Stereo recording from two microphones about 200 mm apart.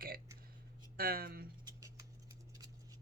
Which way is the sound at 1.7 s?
15° right (ahead or behind).